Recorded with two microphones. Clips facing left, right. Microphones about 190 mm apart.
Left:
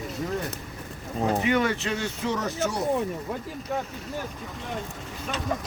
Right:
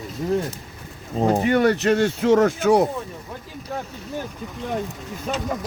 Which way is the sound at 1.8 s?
70° right (ahead or behind).